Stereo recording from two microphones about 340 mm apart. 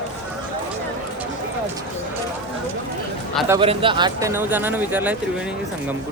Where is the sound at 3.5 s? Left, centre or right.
Centre.